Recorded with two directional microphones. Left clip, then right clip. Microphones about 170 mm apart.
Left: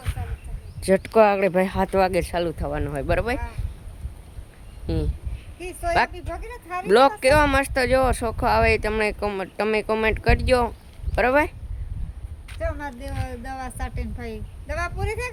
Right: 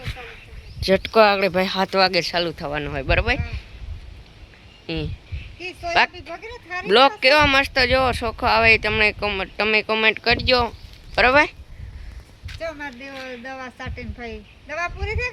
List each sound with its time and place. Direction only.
0.0 s a sound: 5° right (ahead or behind)
0.9 s speech: 5° left (ahead or behind)
4.9 s speech: 5° left (ahead or behind)
6.2 s speech: 10° right (ahead or behind)
6.8 s speech: 5° left (ahead or behind)
12.5 s a sound: 5° right (ahead or behind)
13.4 s a woman's voice: 30° left (ahead or behind)